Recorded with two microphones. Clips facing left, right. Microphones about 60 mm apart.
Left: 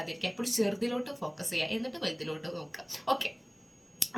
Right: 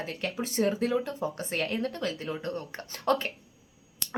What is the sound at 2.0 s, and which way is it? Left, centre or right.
Speech, right.